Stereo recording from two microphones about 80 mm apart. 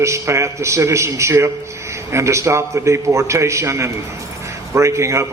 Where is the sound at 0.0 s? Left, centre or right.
Right.